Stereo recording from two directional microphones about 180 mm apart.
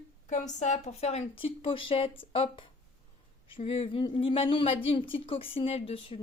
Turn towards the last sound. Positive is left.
turn(degrees=30)  # may be behind; listen again after turning